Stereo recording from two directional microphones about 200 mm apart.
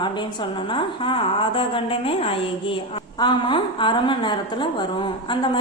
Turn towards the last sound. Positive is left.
turn(degrees=25)  # may be behind; listen again after turning